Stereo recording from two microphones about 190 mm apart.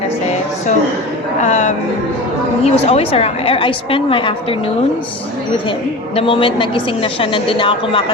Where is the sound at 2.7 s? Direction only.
35° left (ahead or behind).